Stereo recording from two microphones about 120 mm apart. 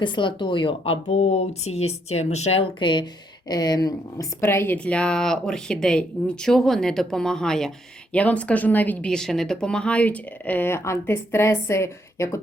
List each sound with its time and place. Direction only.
0.0 s speech: 40° left (ahead or behind)
1.0 s speech: 65° left (ahead or behind)
2.7 s speech: 40° left (ahead or behind)
4.4 s speech: 20° left (ahead or behind)